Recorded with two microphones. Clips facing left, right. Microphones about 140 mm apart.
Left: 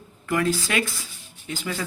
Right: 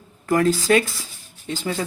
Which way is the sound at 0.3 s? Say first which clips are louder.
Right 6 dB; 40° right (ahead or behind).